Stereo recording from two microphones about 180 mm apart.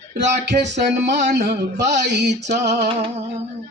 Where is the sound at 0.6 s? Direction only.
75° right (ahead or behind).